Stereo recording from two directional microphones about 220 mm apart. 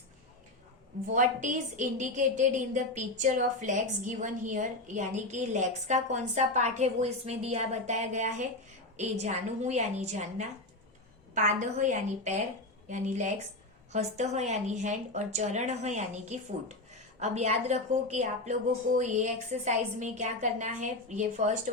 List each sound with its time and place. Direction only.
1.1 s a woman's voice: 35° right (ahead or behind)